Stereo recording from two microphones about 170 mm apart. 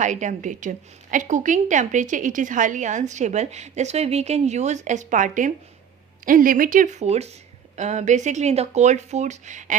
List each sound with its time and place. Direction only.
0.0 s a woman's voice: 45° right (ahead or behind)